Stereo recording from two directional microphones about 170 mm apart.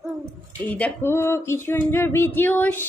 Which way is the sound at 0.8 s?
15° left (ahead or behind).